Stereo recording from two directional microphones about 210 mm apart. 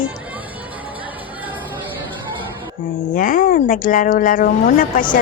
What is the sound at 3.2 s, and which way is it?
Speech, 40° left (ahead or behind).